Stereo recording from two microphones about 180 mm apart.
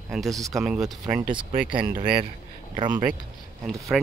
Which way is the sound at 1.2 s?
25° right (ahead or behind).